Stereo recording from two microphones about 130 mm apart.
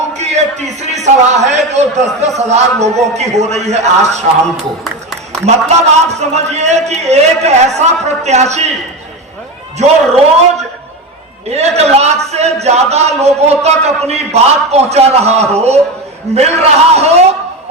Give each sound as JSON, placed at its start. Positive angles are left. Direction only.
{"t": 0.1, "sound": "speech", "side_deg": -60}
{"t": 5.5, "sound": "speech", "side_deg": -60}
{"t": 9.7, "sound": "speech", "side_deg": -55}
{"t": 11.4, "sound": "speech", "side_deg": -55}